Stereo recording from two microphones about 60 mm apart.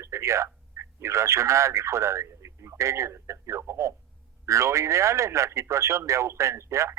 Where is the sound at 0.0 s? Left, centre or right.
Right.